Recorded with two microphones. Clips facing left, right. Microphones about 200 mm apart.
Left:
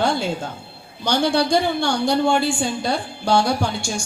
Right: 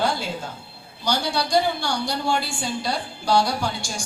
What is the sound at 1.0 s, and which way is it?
Speech, 55° left (ahead or behind).